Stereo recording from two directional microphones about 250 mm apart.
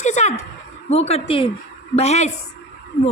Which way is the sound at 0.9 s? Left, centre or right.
Left.